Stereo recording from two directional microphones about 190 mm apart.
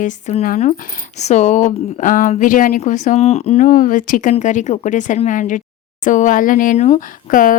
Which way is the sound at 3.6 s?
45° left (ahead or behind).